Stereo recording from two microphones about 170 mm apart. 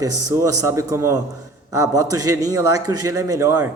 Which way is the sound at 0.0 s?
20° right (ahead or behind).